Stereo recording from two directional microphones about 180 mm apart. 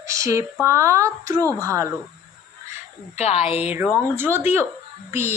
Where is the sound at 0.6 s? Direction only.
15° right (ahead or behind).